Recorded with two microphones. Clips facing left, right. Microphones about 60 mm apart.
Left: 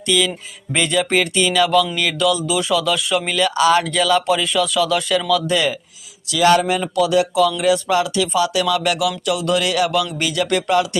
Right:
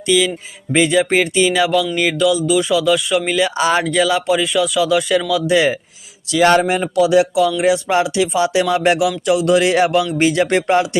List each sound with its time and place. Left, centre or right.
0.1 s speech: centre
2.1 s music: centre
3.3 s speech: centre
3.8 s speech: centre
5.3 s speech: centre
6.3 s speech: right